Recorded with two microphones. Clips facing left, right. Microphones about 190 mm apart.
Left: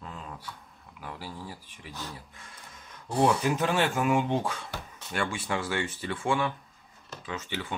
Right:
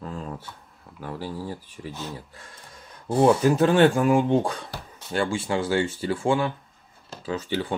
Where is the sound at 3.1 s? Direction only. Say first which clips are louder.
Right 6 dB; 35° right (ahead or behind).